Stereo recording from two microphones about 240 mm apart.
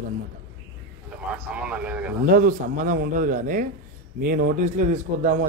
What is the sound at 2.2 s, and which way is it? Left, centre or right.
A man's voice, right.